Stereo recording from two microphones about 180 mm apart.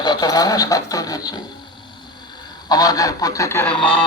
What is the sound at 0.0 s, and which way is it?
Speech, 25° left (ahead or behind).